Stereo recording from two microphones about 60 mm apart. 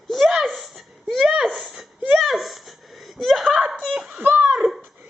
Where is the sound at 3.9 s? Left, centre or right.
Centre.